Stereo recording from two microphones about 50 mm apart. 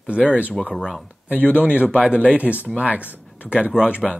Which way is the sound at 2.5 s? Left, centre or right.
Centre.